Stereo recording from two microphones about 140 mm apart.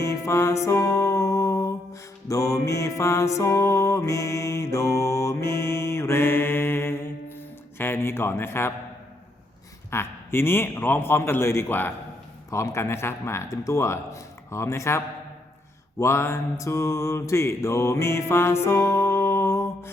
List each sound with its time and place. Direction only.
0.0 s music: 20° left (ahead or behind)
9.9 s a man's voice: 20° left (ahead or behind)
18.6 s music: 20° left (ahead or behind)